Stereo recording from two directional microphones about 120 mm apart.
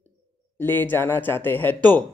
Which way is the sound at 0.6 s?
15° left (ahead or behind).